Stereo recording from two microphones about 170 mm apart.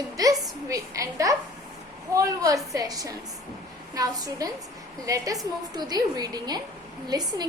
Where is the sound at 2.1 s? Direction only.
20° right (ahead or behind).